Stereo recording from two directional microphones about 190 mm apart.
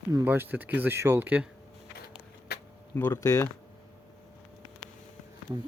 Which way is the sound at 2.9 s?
10° left (ahead or behind).